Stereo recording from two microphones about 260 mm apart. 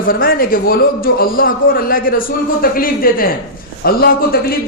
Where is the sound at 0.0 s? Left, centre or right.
Left.